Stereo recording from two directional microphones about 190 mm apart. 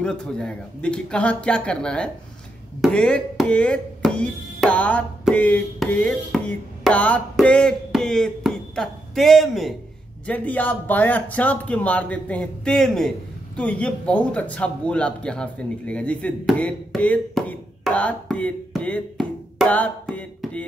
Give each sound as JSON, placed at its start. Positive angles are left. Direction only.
{"t": 0.0, "sound": "speech", "side_deg": 5}